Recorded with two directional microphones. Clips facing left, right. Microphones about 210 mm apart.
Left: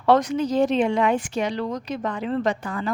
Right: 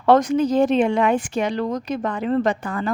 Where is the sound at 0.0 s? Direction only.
50° right (ahead or behind).